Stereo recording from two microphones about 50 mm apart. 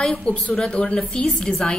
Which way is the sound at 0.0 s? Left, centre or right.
Centre.